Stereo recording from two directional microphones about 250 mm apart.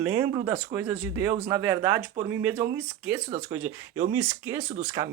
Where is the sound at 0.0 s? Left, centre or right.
Centre.